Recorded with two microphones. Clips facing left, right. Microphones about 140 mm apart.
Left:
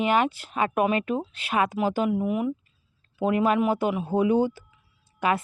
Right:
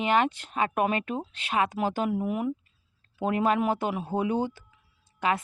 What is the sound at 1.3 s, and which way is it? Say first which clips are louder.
Speech: right 1 dB; 40° right (ahead or behind).